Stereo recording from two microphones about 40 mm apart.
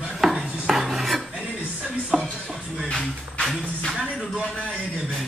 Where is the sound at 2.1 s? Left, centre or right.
Centre.